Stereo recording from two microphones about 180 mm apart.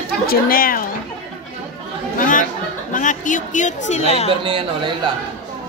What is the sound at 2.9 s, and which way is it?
A woman's voice, 45° left (ahead or behind).